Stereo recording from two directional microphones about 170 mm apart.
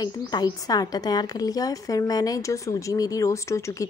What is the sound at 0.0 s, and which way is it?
A woman's voice, 25° left (ahead or behind).